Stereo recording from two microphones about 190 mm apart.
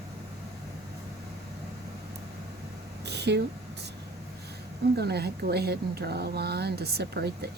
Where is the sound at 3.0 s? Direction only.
60° right (ahead or behind).